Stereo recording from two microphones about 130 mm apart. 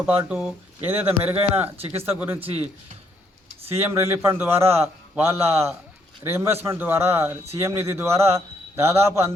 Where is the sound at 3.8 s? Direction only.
20° right (ahead or behind).